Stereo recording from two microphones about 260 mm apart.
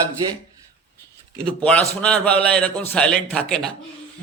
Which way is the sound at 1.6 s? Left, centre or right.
Centre.